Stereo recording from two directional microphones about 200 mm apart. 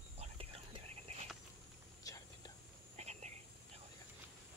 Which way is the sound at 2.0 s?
15° left (ahead or behind).